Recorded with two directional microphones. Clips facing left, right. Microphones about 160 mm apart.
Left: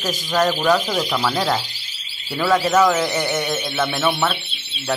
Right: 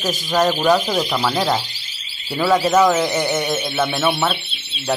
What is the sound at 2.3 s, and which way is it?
Speech, 10° right (ahead or behind).